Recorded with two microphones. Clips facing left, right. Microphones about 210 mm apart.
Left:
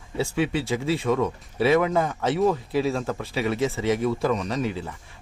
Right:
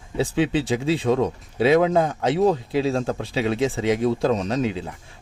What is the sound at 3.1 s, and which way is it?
Speech, 20° right (ahead or behind).